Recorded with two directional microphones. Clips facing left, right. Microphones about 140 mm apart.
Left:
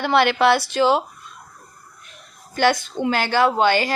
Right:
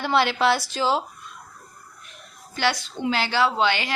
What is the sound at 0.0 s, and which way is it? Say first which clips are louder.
Speech: left 4 dB; 60° left (ahead or behind).